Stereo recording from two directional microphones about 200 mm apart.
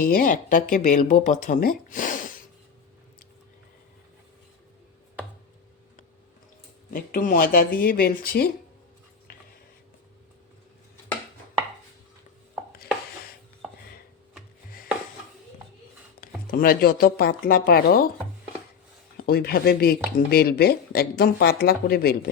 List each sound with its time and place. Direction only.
0.0 s speech: 45° left (ahead or behind)
1.9 s a sound: 40° left (ahead or behind)
6.9 s speech: 45° left (ahead or behind)
16.2 s speech: 45° left (ahead or behind)
19.1 s speech: 50° left (ahead or behind)